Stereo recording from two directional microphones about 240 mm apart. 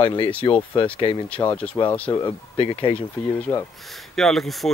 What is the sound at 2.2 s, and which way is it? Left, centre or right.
Speech, left.